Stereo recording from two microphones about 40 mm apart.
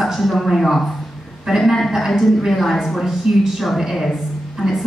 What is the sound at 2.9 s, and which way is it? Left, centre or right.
A woman's voice, centre.